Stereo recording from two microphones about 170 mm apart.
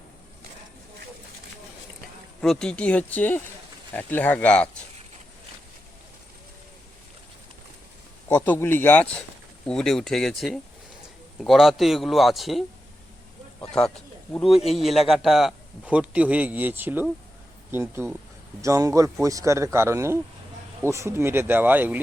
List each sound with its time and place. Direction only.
2.4 s speech: 5° left (ahead or behind)
8.3 s a man's voice: 10° left (ahead or behind); by 22.0 s 10° right (ahead or behind)